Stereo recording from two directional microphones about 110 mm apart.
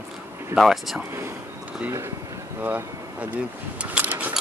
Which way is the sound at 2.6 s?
15° right (ahead or behind).